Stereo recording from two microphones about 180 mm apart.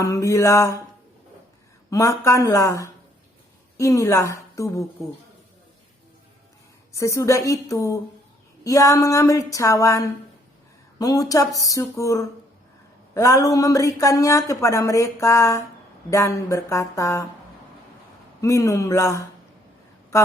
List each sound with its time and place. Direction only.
0.0 s speech: 15° left (ahead or behind)
1.9 s speech: 15° left (ahead or behind)
6.9 s speech: 15° left (ahead or behind)
18.4 s speech: 15° left (ahead or behind)